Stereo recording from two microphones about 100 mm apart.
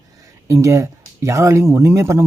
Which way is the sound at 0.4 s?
30° right (ahead or behind).